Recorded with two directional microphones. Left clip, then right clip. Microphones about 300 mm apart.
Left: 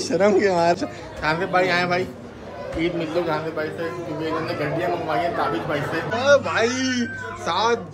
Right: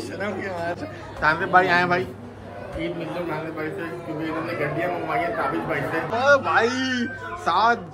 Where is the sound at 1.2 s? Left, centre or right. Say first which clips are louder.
Right 2 dB; centre.